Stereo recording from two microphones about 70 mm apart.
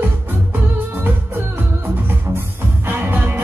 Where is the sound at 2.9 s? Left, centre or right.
Right.